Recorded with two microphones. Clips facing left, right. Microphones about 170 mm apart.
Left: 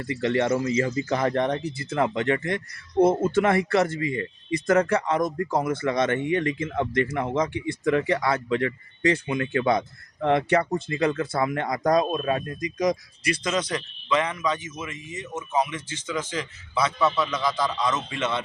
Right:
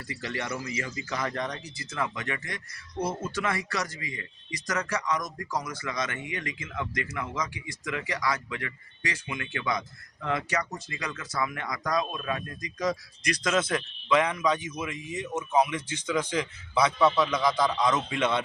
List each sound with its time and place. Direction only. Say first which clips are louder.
0.0 s speech: left 11 dB; 25° left (ahead or behind)
11.8 s speech: left 8 dB; 50° left (ahead or behind)
12.1 s speech: left 7 dB; 30° left (ahead or behind)
13.3 s a man's voice: even; centre (ahead or behind)
17.1 s a man's voice: right 1 dB; centre (ahead or behind)
17.3 s a man's voice: right 1 dB; 10° right (ahead or behind)